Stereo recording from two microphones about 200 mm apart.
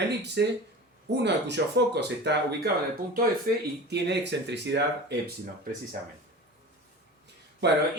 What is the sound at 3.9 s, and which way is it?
Speech, 60° right (ahead or behind).